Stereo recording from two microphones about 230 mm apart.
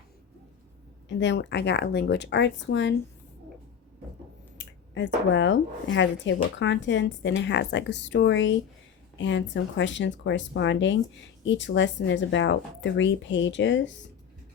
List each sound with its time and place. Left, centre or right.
1.0 s speech: left
4.5 s speech: left